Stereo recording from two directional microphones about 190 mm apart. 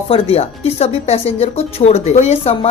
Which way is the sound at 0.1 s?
30° left (ahead or behind).